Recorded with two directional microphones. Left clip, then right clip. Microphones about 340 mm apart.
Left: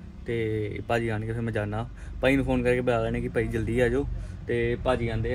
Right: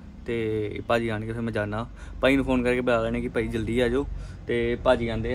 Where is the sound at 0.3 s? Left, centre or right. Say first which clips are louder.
Right 2 dB; centre.